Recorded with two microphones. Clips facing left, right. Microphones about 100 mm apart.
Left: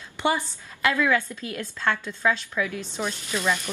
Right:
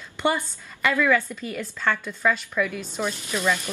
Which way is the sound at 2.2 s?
10° left (ahead or behind).